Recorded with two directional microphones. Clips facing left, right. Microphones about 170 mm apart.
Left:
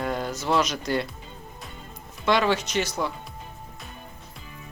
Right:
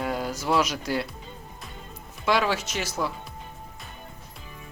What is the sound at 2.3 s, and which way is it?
Speech, 5° right (ahead or behind).